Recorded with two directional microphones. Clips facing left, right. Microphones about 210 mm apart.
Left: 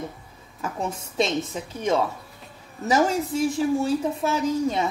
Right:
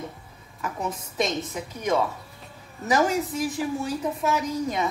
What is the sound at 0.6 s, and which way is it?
Speech, 25° left (ahead or behind).